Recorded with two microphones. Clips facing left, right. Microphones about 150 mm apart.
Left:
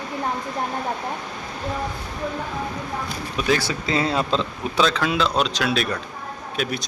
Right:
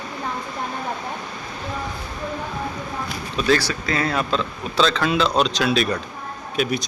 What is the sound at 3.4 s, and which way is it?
Speech, 15° left (ahead or behind).